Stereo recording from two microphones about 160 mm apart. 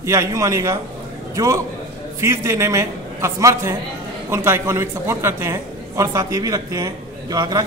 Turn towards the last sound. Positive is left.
turn(degrees=-20)  # may be behind; listen again after turning